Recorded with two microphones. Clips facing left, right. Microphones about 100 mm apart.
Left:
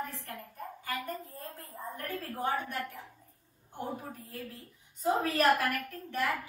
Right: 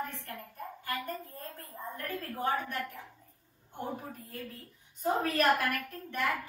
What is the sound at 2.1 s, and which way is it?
A woman's voice, centre (ahead or behind).